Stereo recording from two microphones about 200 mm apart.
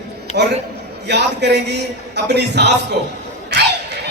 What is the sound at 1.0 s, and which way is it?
A man's voice, 55° right (ahead or behind).